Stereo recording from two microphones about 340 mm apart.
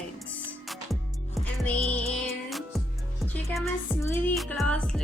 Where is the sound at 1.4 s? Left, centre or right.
Centre.